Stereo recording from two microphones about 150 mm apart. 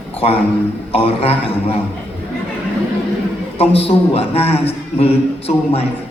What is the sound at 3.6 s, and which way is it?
A man's voice, 40° left (ahead or behind).